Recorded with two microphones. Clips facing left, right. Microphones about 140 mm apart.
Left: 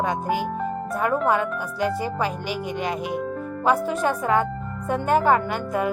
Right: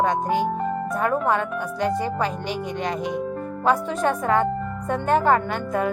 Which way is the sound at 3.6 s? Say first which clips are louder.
Even; 5° left (ahead or behind).